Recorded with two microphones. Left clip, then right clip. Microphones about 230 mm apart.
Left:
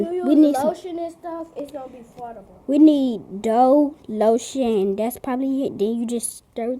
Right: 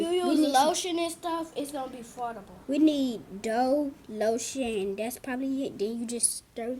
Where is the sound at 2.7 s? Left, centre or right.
Left.